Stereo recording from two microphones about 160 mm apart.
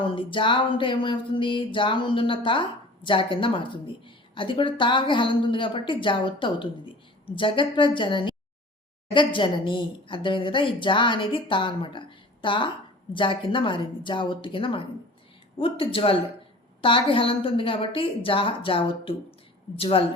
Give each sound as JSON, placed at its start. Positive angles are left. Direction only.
{"t": 0.0, "sound": "speech", "side_deg": 35}